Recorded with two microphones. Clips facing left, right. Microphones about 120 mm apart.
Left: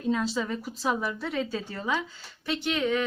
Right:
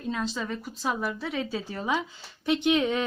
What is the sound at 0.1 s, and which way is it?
A woman's voice, centre (ahead or behind).